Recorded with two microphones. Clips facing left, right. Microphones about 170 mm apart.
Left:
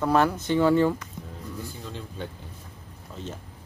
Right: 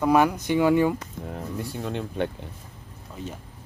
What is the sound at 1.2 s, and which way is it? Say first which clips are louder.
Speech: right 7 dB; 65° right (ahead or behind).